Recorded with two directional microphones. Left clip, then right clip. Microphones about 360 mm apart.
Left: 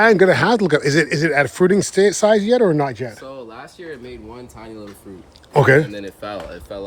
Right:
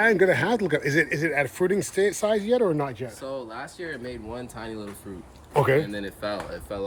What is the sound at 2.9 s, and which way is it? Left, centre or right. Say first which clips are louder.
Speech: left 8 dB; left.